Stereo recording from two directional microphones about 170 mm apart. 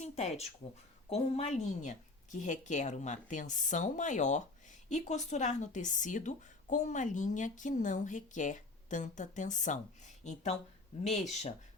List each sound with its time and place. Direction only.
0.0 s a woman's voice: 40° left (ahead or behind)